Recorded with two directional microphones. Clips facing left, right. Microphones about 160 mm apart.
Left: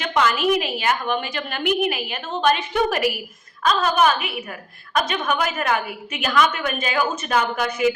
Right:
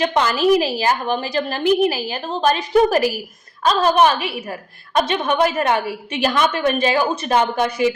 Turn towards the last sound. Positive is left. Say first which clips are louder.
# right 3 dB
turn(degrees=-30)  # may be behind; listen again after turning